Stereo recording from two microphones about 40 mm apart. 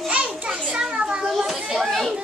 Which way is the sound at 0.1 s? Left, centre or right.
Right.